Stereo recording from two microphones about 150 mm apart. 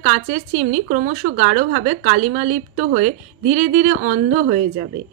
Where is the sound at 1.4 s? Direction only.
55° right (ahead or behind).